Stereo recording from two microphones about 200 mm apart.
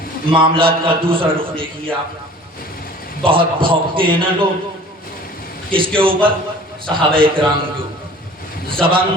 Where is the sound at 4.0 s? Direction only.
25° right (ahead or behind).